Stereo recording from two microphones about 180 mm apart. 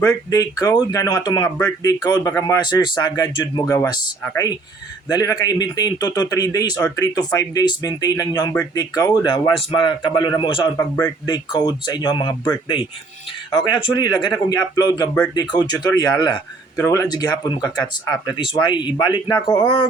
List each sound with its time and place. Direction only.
0.0 s speech: 20° left (ahead or behind)
10.8 s speech: 15° left (ahead or behind)
13.5 s speech: 25° left (ahead or behind)